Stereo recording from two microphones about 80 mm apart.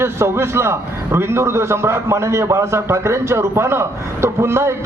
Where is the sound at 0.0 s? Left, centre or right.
Right.